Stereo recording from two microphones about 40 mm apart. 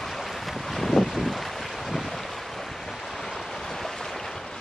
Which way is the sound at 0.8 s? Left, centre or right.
Centre.